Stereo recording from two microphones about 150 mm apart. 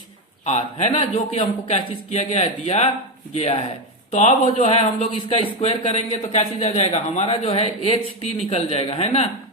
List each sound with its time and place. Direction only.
0.4 s a man's voice: 45° left (ahead or behind)